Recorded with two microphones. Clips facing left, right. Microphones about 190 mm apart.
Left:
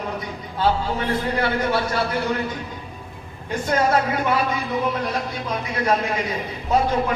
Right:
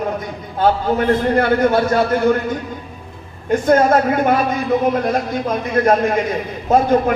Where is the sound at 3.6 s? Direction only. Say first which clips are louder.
Right 6 dB; 50° right (ahead or behind).